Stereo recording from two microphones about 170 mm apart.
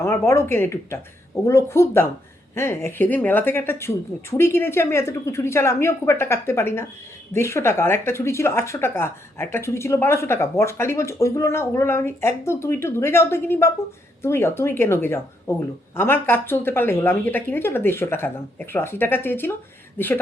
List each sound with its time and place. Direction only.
0.0 s speech: 15° left (ahead or behind)